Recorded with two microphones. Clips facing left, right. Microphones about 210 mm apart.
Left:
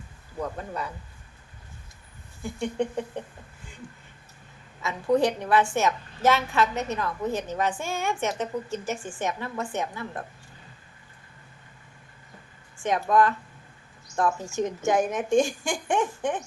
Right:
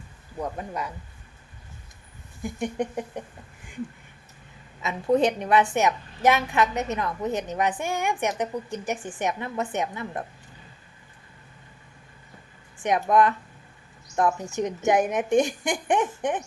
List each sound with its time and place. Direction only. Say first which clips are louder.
2.4 s a sound: even; 15° right (ahead or behind)
4.8 s a woman's voice: right 1 dB; 20° right (ahead or behind)
12.8 s a woman's voice: right 1 dB; 20° right (ahead or behind)